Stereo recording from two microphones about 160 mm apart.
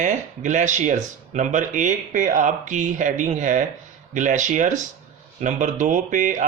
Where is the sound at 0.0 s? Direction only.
50° right (ahead or behind).